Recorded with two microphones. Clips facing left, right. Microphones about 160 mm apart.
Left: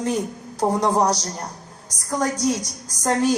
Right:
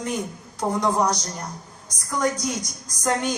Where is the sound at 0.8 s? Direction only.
35° left (ahead or behind).